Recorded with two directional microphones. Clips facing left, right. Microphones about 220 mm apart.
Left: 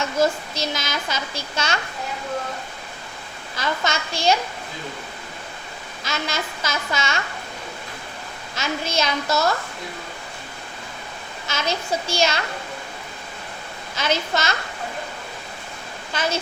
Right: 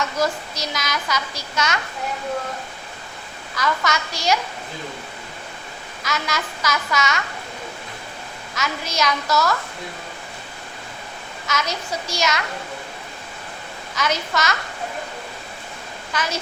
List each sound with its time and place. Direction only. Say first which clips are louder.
0.0 s speech: left 2 dB; 25° left (ahead or behind)
3.5 s speech: right 2 dB; 25° left (ahead or behind)
6.0 s speech: right 1 dB; 25° left (ahead or behind)
8.5 s speech: left 1 dB; 25° left (ahead or behind)
11.4 s speech: left 1 dB; 30° left (ahead or behind)
13.9 s speech: left 1 dB; 30° left (ahead or behind)
16.1 s speech: left 2 dB; 25° left (ahead or behind)